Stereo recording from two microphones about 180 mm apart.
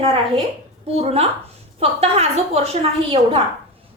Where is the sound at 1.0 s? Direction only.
35° right (ahead or behind).